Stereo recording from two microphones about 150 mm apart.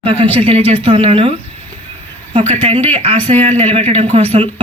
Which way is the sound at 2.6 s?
45° right (ahead or behind).